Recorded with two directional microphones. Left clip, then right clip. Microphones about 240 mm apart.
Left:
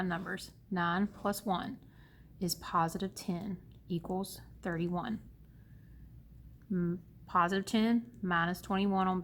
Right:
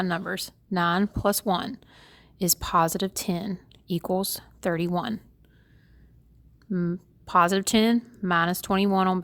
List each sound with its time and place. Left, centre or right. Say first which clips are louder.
0.0 s a woman's voice: right 9 dB; right
6.7 s a woman's voice: right 7 dB; right